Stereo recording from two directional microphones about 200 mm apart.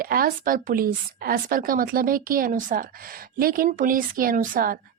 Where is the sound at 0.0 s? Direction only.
45° right (ahead or behind).